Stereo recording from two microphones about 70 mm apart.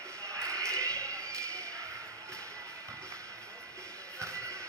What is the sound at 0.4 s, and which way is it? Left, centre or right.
Basketball bounce, right.